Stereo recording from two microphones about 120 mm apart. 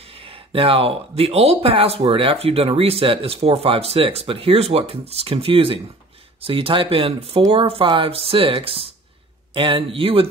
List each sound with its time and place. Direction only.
0.5 s speech: 50° right (ahead or behind)